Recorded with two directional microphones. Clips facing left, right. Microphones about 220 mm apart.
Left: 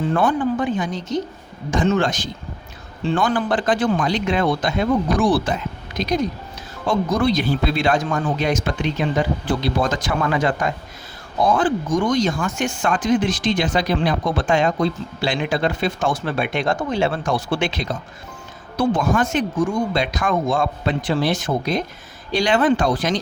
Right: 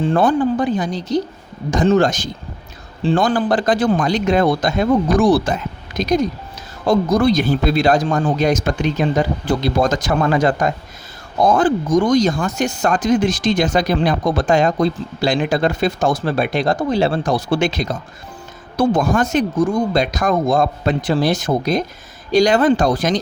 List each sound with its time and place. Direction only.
0.0 s speech: 35° right (ahead or behind)